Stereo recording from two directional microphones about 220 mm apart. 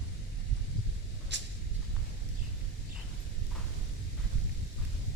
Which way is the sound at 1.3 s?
50° right (ahead or behind).